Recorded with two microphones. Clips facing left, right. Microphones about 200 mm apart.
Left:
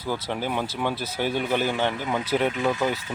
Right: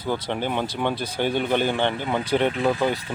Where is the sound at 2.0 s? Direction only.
30° right (ahead or behind).